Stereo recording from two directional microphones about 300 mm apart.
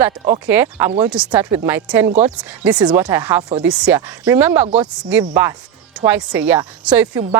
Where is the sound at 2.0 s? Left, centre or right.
Right.